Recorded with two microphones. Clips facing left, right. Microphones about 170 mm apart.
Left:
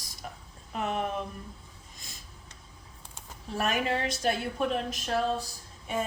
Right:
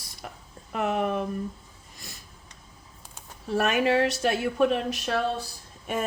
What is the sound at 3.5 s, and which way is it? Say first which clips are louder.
Speech: right 6 dB; 70° right (ahead or behind).